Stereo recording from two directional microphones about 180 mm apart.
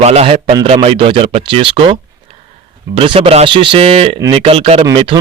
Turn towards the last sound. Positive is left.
turn(degrees=-25)  # may be behind; listen again after turning